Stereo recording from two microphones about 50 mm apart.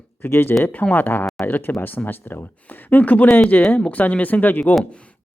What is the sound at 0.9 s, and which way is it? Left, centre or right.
Speech, left.